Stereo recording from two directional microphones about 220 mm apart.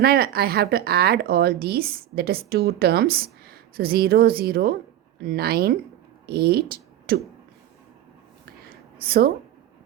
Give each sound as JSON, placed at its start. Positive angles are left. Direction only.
{"t": 0.0, "sound": "a woman's voice", "side_deg": -45}
{"t": 9.0, "sound": "speech", "side_deg": -45}